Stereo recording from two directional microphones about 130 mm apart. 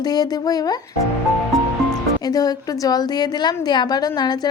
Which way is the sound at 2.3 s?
30° left (ahead or behind).